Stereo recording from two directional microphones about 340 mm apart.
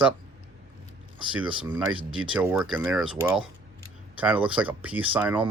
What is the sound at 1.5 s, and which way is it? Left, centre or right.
Speech, centre.